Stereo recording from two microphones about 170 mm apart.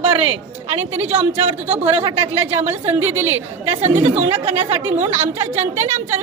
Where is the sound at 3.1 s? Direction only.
40° right (ahead or behind).